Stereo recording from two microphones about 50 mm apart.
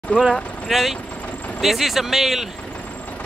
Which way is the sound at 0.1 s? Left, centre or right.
Left.